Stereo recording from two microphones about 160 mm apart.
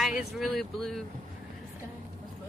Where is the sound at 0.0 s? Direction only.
5° right (ahead or behind).